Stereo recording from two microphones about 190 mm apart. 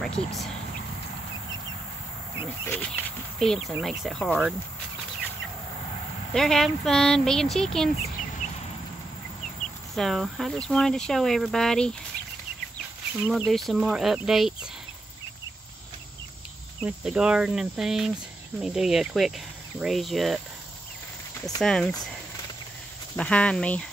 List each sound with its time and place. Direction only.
0.0 s speech: centre (ahead or behind)
2.6 s speech: 10° left (ahead or behind)
6.3 s speech: centre (ahead or behind)
8.4 s a sound: 40° left (ahead or behind)
9.9 s speech: centre (ahead or behind)
13.5 s speech: centre (ahead or behind)
16.8 s speech: 5° right (ahead or behind)
21.5 s speech: 5° left (ahead or behind)
23.1 s speech: 5° left (ahead or behind)